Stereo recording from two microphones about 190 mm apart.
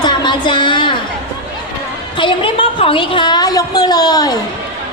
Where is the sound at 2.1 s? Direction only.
25° left (ahead or behind).